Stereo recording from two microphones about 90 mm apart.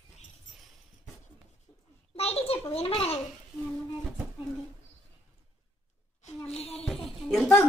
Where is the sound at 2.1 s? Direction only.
90° left.